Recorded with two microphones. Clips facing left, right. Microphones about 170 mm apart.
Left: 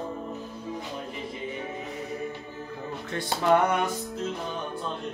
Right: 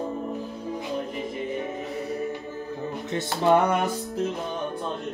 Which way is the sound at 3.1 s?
20° right (ahead or behind).